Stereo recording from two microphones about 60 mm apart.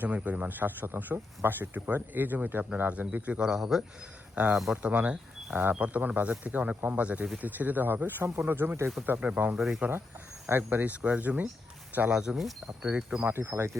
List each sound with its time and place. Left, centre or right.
0.0 s speech: right
3.4 s speech: centre
4.8 s speech: right
9.2 s speech: right
9.6 s speech: centre
10.5 s speech: right
12.1 s speech: centre
13.2 s speech: right